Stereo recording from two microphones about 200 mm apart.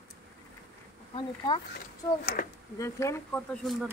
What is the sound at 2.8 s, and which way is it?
Speech, 15° left (ahead or behind).